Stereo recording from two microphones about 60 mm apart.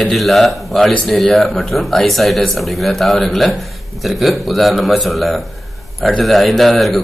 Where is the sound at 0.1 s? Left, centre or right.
Centre.